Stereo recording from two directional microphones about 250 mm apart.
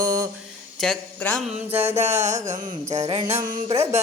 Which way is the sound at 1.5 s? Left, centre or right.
Right.